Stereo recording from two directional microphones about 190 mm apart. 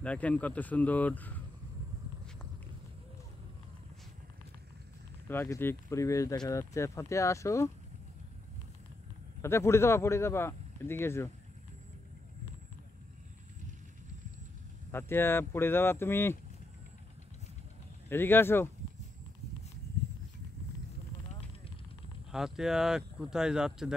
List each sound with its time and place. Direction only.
0.0 s speech: 5° left (ahead or behind)
5.3 s speech: 10° left (ahead or behind)
9.4 s speech: 15° left (ahead or behind)
14.9 s speech: 10° left (ahead or behind)
18.1 s speech: 10° left (ahead or behind)
22.3 s speech: centre (ahead or behind)